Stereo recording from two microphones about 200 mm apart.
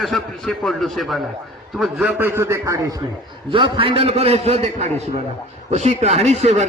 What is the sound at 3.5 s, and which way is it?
A man's voice, 25° right (ahead or behind).